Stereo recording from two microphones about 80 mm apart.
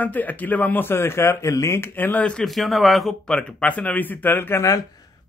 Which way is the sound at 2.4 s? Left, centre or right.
Centre.